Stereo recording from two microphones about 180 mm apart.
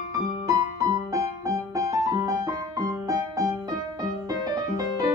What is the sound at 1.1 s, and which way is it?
Music, 20° right (ahead or behind).